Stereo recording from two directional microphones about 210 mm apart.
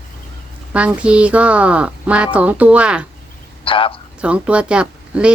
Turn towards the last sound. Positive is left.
turn(degrees=-5)  # may be behind; listen again after turning